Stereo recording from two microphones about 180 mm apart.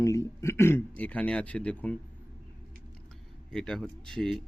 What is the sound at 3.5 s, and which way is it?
Speech, 5° left (ahead or behind).